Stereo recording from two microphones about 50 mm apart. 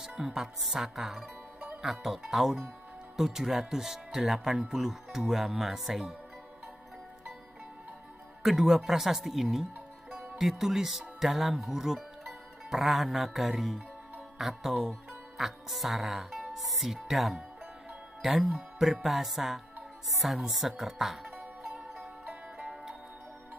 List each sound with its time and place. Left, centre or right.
0.2 s speech: centre
8.4 s speech: centre
21.9 s music: centre